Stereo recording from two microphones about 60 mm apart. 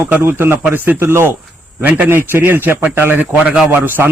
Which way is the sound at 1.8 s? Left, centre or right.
Right.